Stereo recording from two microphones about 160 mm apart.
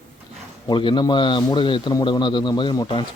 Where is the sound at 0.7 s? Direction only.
30° left (ahead or behind).